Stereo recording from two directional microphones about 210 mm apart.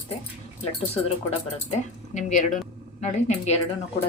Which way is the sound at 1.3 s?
35° left (ahead or behind).